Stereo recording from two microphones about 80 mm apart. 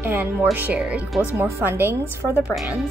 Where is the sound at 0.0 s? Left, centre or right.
Right.